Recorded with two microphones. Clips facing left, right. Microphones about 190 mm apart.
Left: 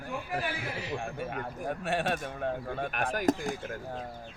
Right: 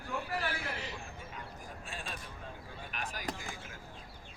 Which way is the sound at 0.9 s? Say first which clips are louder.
Left 11 dB; 70° left (ahead or behind).